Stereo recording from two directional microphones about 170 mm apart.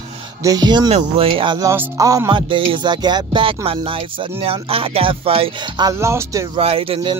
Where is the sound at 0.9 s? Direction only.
35° right (ahead or behind).